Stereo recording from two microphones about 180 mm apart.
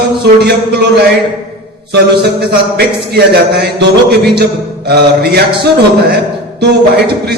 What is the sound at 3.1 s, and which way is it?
A man's voice, 60° right (ahead or behind).